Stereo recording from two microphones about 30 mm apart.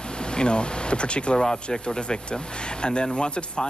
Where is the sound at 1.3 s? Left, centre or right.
Left.